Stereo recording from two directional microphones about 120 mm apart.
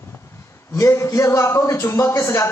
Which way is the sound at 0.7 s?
25° left (ahead or behind).